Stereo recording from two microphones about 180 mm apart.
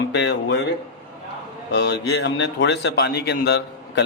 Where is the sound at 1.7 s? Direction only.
75° left (ahead or behind).